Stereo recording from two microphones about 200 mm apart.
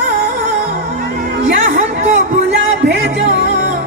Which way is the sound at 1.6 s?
40° right (ahead or behind).